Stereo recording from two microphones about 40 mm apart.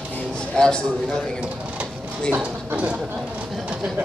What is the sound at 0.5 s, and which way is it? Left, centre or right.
Speech, left.